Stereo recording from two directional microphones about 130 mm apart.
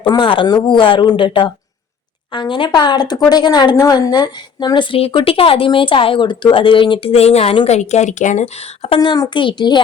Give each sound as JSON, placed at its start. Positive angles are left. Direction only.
{"t": 0.0, "sound": "speech", "side_deg": 35}
{"t": 7.7, "sound": "a woman's voice", "side_deg": 60}
{"t": 8.9, "sound": "speech", "side_deg": 35}